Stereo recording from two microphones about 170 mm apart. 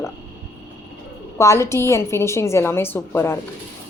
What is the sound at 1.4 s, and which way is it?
A woman's voice, 15° left (ahead or behind).